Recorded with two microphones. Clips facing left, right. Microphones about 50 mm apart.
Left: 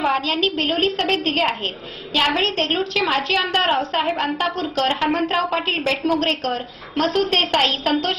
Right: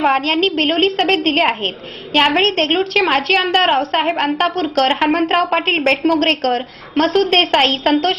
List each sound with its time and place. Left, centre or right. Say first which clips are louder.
0.0 s a woman's voice: right 5 dB; right
7.2 s a woman's voice: right 5 dB; right